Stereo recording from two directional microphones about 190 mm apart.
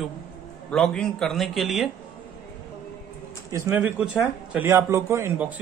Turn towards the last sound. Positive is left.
turn(degrees=-10)  # may be behind; listen again after turning